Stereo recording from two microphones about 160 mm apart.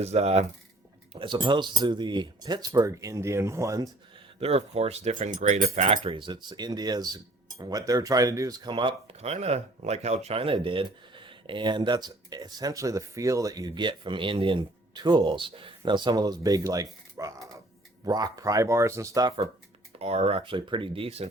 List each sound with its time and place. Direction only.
0.0 s speech: 40° right (ahead or behind)
1.1 s speech: 30° right (ahead or behind)
4.4 s speech: 40° right (ahead or behind)
6.0 s speech: 30° right (ahead or behind)
17.2 s a sound: 20° right (ahead or behind)
18.0 s speech: 25° right (ahead or behind)
20.0 s speech: 40° right (ahead or behind)